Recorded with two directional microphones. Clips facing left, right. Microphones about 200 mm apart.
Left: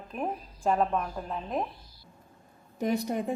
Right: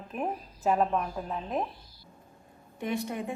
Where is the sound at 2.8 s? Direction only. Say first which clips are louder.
Left 4 dB; 40° left (ahead or behind).